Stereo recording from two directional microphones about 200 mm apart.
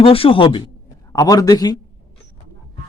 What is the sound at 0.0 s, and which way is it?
A man's voice, 25° left (ahead or behind).